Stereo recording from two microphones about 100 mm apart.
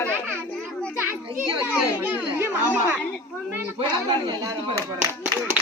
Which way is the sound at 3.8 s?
50° right (ahead or behind).